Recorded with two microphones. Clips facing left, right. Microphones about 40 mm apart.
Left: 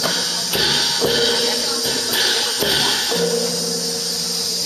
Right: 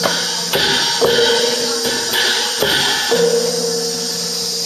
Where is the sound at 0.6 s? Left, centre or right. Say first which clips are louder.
Right 4 dB; right.